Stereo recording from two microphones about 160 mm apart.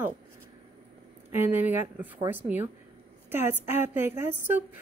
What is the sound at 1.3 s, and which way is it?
Speech, 15° right (ahead or behind).